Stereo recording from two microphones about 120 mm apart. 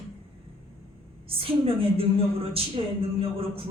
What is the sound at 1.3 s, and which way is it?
Speech, 50° right (ahead or behind).